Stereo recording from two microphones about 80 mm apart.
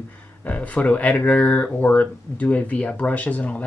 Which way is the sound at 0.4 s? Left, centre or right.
Centre.